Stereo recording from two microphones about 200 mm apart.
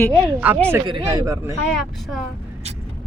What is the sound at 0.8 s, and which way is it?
Speech, 20° right (ahead or behind).